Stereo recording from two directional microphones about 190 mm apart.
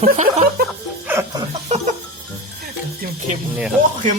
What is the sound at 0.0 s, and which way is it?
Music, 35° right (ahead or behind).